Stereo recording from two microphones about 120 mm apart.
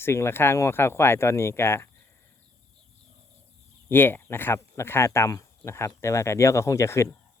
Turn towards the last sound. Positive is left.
turn(degrees=25)  # may be behind; listen again after turning